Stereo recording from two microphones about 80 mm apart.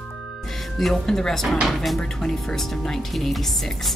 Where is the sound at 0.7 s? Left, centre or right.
Centre.